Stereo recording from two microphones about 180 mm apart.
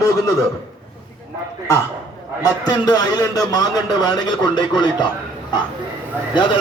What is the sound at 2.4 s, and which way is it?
A man's voice, 20° left (ahead or behind).